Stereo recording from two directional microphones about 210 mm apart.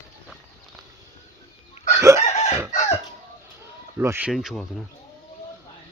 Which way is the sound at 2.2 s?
35° left (ahead or behind).